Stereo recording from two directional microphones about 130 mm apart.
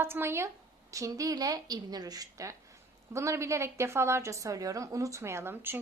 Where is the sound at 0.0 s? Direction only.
20° right (ahead or behind).